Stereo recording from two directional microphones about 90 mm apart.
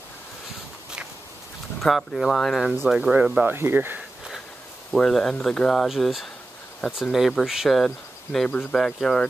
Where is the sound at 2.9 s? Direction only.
10° right (ahead or behind).